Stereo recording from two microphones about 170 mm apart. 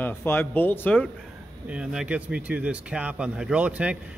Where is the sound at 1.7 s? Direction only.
5° right (ahead or behind).